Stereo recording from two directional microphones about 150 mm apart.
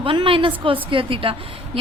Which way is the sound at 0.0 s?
35° right (ahead or behind).